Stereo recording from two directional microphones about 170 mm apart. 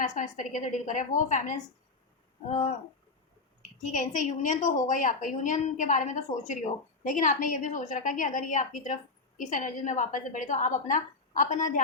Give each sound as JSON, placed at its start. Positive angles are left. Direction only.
{"t": 0.0, "sound": "a woman's voice", "side_deg": 45}